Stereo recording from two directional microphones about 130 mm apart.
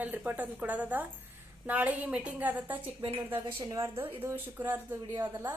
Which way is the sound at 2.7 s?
40° right (ahead or behind).